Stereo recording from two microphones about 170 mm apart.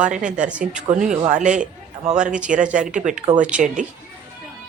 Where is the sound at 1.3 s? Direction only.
45° right (ahead or behind).